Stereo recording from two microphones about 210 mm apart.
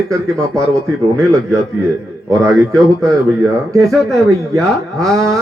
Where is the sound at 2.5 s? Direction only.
Centre (ahead or behind).